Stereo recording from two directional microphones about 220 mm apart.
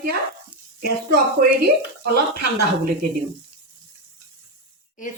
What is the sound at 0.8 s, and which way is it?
Speech, 40° right (ahead or behind).